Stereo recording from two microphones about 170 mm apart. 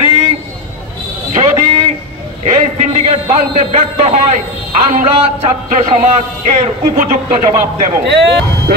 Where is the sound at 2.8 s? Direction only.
40° right (ahead or behind).